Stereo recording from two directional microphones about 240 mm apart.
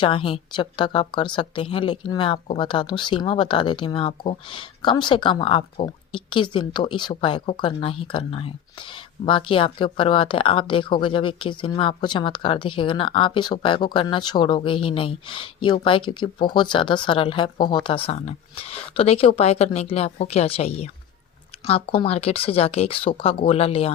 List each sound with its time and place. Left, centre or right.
0.0 s speech: left